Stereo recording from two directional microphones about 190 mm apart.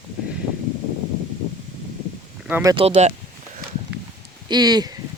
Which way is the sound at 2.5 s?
15° right (ahead or behind).